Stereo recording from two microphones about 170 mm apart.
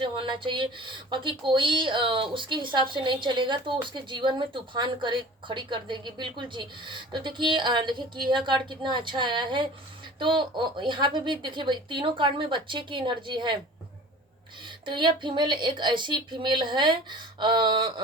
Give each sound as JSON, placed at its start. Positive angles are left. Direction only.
{"t": 0.0, "sound": "speech", "side_deg": -30}
{"t": 14.8, "sound": "speech", "side_deg": -25}